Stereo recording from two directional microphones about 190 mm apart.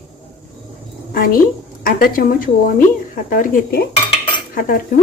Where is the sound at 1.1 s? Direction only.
50° left (ahead or behind).